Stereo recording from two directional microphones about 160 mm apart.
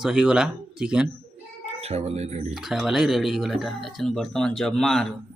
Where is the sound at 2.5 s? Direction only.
Centre (ahead or behind).